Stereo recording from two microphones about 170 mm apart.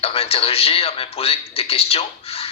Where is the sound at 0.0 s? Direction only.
35° left (ahead or behind).